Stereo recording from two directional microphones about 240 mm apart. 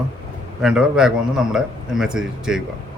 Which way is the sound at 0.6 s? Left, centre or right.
Centre.